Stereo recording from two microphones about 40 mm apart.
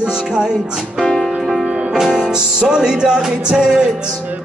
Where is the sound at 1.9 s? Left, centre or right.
Centre.